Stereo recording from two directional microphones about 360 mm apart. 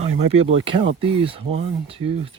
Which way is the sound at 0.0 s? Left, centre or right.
Centre.